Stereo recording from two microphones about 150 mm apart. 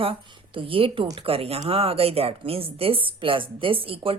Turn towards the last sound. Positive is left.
turn(degrees=-40)  # may be behind; listen again after turning